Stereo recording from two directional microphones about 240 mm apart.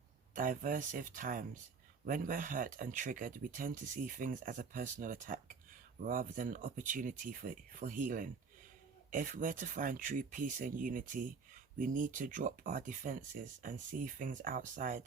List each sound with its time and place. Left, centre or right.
0.3 s speech: right